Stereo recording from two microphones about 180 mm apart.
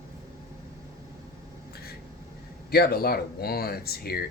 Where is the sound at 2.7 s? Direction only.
60° left (ahead or behind).